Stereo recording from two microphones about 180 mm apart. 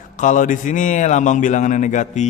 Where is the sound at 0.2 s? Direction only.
45° left (ahead or behind).